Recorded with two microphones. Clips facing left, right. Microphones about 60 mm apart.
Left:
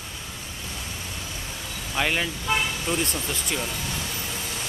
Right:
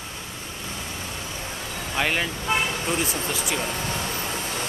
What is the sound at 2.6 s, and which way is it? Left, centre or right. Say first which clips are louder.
Toot: right 1 dB; right.